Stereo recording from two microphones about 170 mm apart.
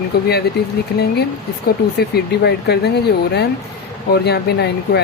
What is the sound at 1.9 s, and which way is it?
Speech, 75° left (ahead or behind).